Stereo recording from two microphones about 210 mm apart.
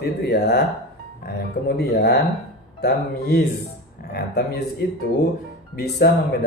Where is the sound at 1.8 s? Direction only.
50° left (ahead or behind).